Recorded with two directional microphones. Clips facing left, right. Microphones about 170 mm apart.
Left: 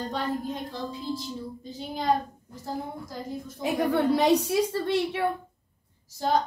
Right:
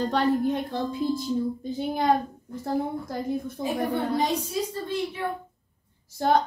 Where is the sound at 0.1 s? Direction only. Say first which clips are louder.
Right 8 dB; 70° right (ahead or behind).